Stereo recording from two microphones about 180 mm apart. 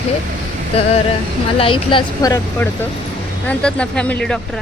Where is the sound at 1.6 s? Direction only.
30° left (ahead or behind).